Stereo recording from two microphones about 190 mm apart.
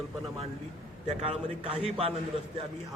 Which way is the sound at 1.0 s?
30° right (ahead or behind).